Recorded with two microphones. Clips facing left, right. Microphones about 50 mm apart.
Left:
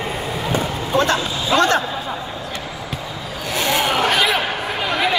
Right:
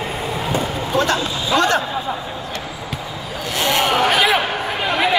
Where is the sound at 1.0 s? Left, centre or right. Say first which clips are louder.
Left 1 dB; left.